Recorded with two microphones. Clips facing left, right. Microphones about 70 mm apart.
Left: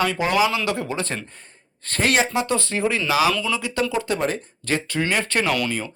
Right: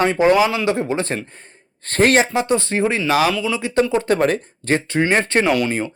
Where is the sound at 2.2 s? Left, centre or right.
Right.